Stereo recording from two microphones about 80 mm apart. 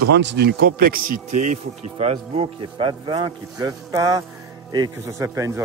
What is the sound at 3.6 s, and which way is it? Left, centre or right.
A man's voice, right.